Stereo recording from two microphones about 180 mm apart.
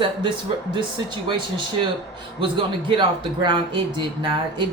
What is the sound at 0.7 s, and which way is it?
Speech, 25° right (ahead or behind).